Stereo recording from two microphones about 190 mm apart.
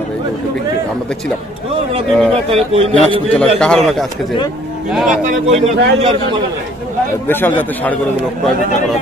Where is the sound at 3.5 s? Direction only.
5° left (ahead or behind).